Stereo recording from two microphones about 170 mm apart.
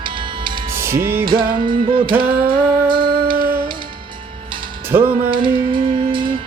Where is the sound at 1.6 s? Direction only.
30° right (ahead or behind).